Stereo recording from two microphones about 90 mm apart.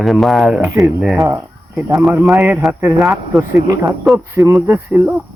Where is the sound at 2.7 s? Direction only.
20° right (ahead or behind).